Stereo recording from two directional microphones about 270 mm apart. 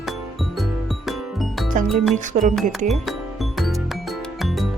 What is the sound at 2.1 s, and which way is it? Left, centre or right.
Speech, right.